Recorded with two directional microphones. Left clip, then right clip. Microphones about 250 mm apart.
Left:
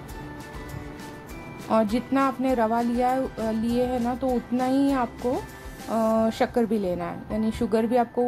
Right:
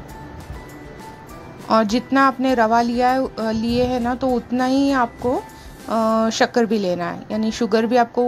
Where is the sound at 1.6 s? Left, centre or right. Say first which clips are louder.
Right 6 dB; centre.